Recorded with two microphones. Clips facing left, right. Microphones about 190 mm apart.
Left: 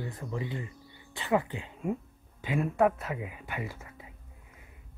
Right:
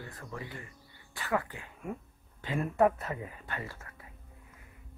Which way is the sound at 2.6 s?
Centre (ahead or behind).